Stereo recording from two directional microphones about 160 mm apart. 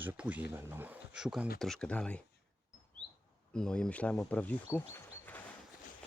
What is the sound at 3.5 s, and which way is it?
Speech, 5° left (ahead or behind).